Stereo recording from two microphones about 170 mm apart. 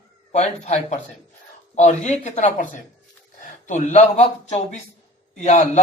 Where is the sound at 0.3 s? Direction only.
40° left (ahead or behind).